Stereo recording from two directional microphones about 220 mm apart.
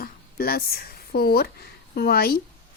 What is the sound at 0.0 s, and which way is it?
Speech, 45° left (ahead or behind).